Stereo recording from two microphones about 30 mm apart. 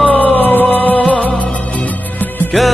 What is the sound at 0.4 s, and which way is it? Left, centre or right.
Music, left.